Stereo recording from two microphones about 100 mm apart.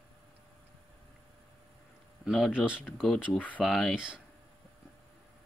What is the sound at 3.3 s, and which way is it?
Speech, 15° left (ahead or behind).